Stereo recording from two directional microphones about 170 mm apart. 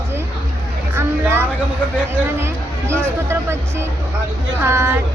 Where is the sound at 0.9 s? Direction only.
15° right (ahead or behind).